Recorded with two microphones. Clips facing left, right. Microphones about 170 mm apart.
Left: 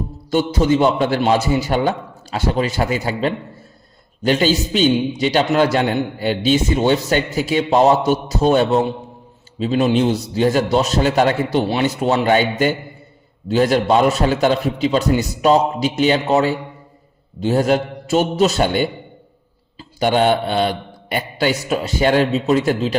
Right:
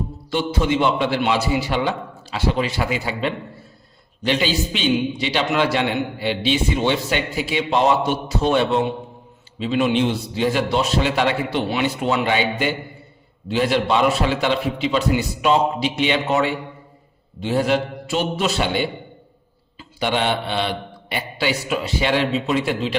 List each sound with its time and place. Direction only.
0.3 s a man's voice: 40° left (ahead or behind)
20.0 s a man's voice: 45° left (ahead or behind)